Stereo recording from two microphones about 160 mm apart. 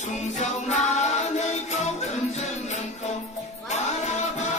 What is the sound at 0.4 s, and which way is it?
Music, 45° left (ahead or behind).